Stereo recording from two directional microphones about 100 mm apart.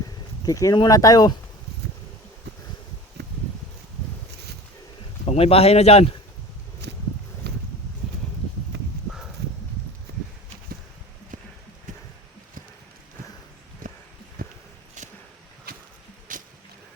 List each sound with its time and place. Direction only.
0.4 s speech: 35° left (ahead or behind)
5.2 s speech: 75° left (ahead or behind)